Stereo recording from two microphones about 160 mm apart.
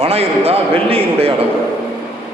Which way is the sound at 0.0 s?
40° right (ahead or behind).